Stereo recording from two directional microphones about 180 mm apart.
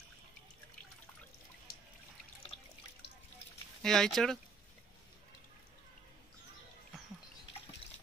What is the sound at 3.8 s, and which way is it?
Speech, centre (ahead or behind).